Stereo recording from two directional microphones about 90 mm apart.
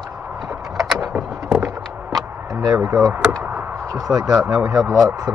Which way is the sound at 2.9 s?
35° right (ahead or behind).